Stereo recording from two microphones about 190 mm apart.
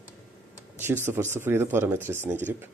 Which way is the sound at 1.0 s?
10° right (ahead or behind).